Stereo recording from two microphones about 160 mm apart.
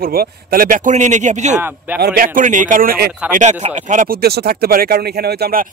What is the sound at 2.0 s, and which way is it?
A man's voice, 70° right (ahead or behind).